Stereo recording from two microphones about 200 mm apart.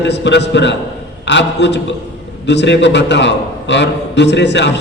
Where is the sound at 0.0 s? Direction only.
60° left (ahead or behind).